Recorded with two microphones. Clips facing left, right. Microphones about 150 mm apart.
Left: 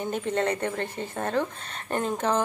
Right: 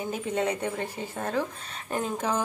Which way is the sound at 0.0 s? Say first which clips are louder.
Left 2 dB; 10° right (ahead or behind).